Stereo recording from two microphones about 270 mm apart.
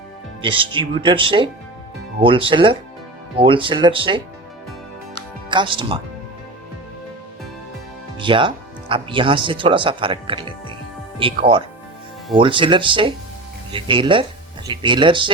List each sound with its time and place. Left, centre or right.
0.4 s speech: centre
5.5 s speech: centre
8.2 s speech: centre